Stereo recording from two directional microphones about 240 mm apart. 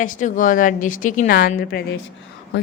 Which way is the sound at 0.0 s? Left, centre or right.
Left.